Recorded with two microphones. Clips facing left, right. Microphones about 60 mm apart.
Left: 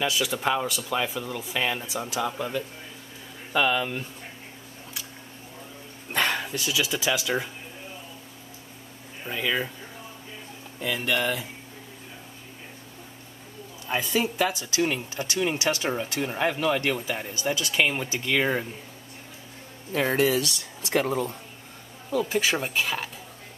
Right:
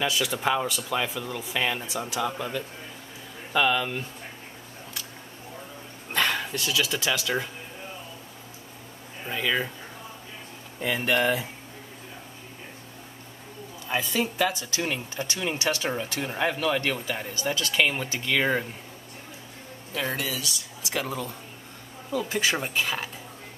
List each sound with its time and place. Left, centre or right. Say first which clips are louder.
0.0 s speech: even; centre
6.1 s speech: even; centre
9.3 s speech: even; centre
10.8 s speech: right 2 dB; centre
14.1 s speech: left 1 dB; centre
14.8 s speech: left 5 dB; centre
15.6 s speech: left 1 dB; centre
16.0 s speech: left 1 dB; centre
19.9 s speech: left 7 dB; left
22.3 s speech: left 1 dB; centre